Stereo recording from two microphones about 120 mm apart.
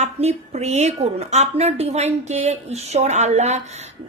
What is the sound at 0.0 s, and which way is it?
A woman's voice, 65° right (ahead or behind).